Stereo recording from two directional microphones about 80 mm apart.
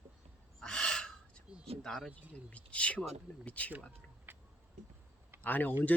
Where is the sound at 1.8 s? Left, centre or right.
Centre.